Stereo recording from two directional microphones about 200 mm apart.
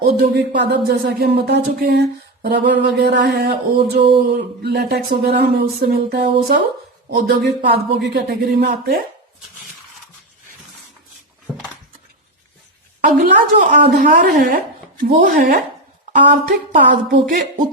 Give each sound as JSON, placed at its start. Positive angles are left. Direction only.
{"t": 0.0, "sound": "speech", "side_deg": -55}
{"t": 13.0, "sound": "speech", "side_deg": -45}